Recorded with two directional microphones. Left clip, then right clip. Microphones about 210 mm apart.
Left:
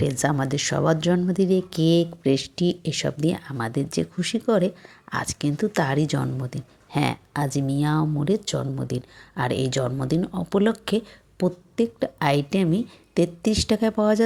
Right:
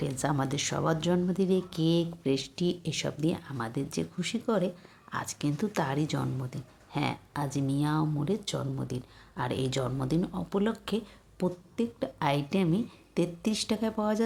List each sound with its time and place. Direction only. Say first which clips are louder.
0.0 s speech: left 7 dB; 25° left (ahead or behind)